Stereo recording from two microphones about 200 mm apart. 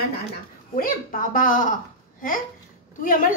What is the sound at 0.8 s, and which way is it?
A woman's voice, 45° left (ahead or behind).